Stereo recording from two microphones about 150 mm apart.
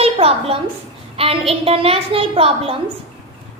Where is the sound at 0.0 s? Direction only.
40° right (ahead or behind).